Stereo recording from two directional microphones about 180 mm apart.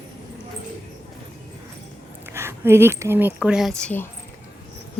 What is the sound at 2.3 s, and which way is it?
Speech, 15° right (ahead or behind).